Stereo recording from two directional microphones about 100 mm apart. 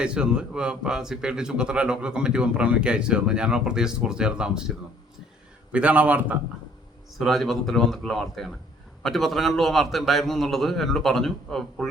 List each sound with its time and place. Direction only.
0.0 s a man's voice: 10° right (ahead or behind)
5.7 s a man's voice: 15° right (ahead or behind)
7.2 s a man's voice: centre (ahead or behind)